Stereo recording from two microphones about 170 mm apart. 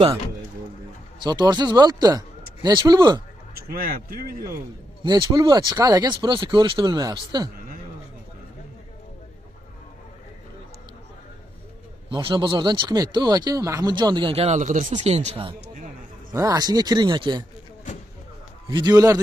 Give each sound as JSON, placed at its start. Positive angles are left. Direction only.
{"t": 1.2, "sound": "speech", "side_deg": -25}
{"t": 3.5, "sound": "a man's voice", "side_deg": -60}
{"t": 5.0, "sound": "speech", "side_deg": -25}
{"t": 12.1, "sound": "speech", "side_deg": -30}
{"t": 16.3, "sound": "speech", "side_deg": -20}
{"t": 18.7, "sound": "speech", "side_deg": -25}